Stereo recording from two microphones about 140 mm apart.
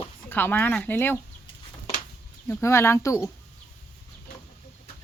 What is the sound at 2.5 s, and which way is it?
Speech, 15° left (ahead or behind).